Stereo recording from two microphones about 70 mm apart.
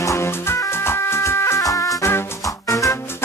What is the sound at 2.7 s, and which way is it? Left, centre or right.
Music, left.